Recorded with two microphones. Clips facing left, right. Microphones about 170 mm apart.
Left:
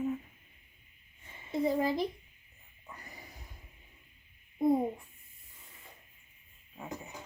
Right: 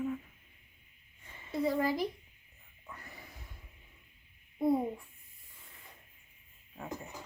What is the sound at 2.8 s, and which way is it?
Snort, 15° left (ahead or behind).